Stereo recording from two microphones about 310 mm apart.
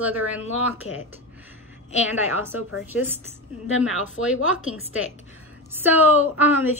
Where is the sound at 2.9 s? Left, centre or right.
Centre.